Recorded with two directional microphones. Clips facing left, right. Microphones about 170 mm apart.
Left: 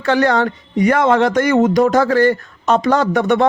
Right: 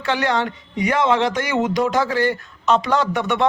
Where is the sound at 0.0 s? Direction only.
45° left (ahead or behind).